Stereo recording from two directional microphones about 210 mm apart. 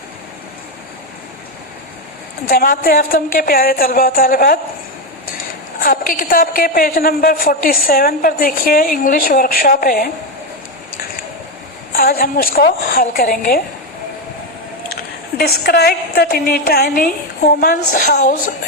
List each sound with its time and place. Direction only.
2.5 s a woman's voice: 45° left (ahead or behind)
5.8 s a woman's voice: 45° left (ahead or behind)
11.9 s a woman's voice: 45° left (ahead or behind)
15.4 s a woman's voice: 50° left (ahead or behind)